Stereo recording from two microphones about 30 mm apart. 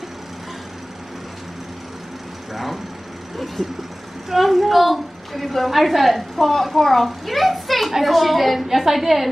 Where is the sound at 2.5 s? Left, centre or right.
Centre.